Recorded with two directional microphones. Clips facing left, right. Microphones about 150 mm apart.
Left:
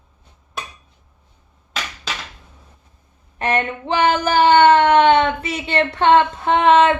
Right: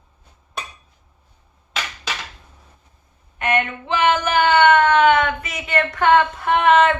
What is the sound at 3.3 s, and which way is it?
Speech, 35° left (ahead or behind).